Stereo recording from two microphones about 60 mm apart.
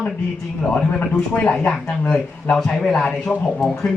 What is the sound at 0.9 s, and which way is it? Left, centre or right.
Speech, centre.